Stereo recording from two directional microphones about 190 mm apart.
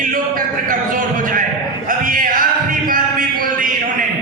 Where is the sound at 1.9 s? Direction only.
45° right (ahead or behind).